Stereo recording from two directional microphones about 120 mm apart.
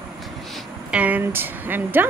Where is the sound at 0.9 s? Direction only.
10° right (ahead or behind).